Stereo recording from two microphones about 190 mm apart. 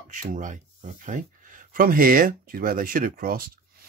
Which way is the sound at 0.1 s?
45° right (ahead or behind).